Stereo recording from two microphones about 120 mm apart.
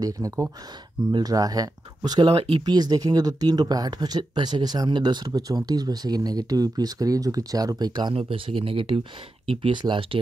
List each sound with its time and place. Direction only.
0.0 s speech: 30° right (ahead or behind); by 2.6 s 50° right (ahead or behind)
2.6 s speech: 35° right (ahead or behind)